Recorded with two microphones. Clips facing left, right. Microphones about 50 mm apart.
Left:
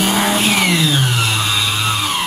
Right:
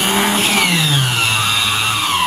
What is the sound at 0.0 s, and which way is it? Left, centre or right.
Vehicle, centre.